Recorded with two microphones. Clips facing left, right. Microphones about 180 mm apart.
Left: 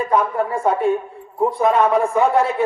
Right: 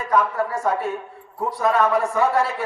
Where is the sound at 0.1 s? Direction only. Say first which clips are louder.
Right 2 dB; 25° left (ahead or behind).